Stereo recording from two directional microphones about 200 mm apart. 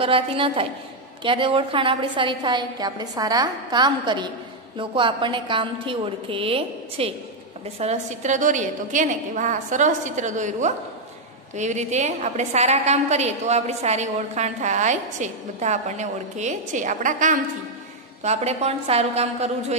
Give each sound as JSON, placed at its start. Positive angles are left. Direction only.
{"t": 0.0, "sound": "a woman's voice", "side_deg": -25}